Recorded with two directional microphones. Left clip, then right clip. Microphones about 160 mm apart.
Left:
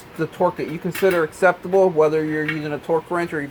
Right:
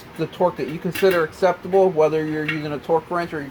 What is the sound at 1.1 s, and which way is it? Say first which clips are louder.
Speech: left 1 dB; 35° left (ahead or behind).